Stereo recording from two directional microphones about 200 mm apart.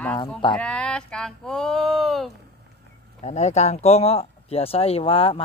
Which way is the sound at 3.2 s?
35° left (ahead or behind).